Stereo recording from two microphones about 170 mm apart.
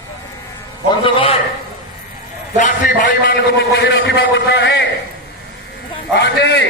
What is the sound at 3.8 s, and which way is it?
A man's voice, 90° left.